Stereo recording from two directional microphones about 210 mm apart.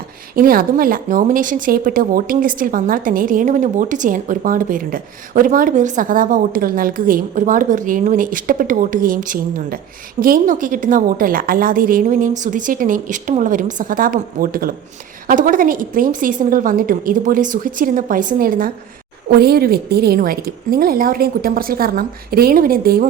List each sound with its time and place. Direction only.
0.3 s a woman's voice: 45° right (ahead or behind)